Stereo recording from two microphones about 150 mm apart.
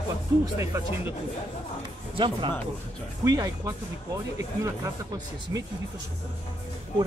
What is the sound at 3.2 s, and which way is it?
Speech, 20° right (ahead or behind).